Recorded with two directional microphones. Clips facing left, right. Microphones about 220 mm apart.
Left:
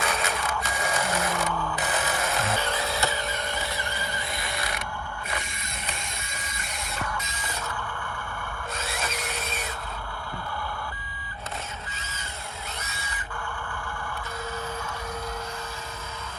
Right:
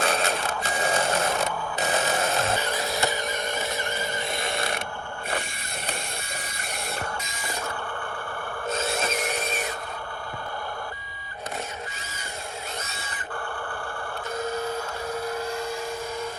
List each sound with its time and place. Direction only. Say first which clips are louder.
0.0 s sewing machine: right 3 dB; 30° right (ahead or behind)
4.4 s mechanisms: right 5 dB; 25° right (ahead or behind)
8.7 s rub: right 7 dB; 25° right (ahead or behind)